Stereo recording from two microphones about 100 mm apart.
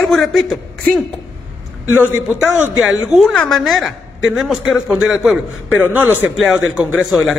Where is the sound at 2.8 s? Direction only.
Centre (ahead or behind).